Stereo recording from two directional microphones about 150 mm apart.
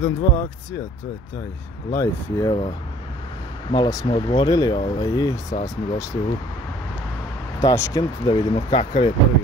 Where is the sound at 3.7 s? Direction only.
25° left (ahead or behind).